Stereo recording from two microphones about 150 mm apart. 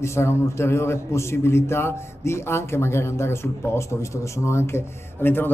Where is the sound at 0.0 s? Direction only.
20° left (ahead or behind).